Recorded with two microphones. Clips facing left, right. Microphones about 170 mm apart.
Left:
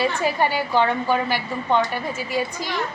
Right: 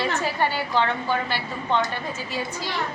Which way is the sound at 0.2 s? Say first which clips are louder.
Left 3 dB; 15° left (ahead or behind).